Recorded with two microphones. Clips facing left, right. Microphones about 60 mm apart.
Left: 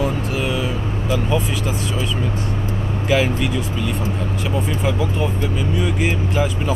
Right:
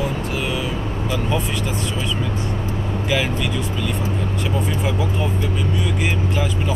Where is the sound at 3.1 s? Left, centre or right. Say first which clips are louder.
Left 4 dB; left.